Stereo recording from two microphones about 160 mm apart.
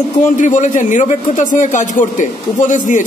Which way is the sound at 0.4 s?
50° left (ahead or behind).